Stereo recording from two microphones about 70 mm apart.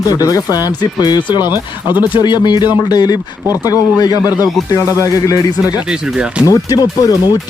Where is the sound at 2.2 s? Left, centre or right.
Left.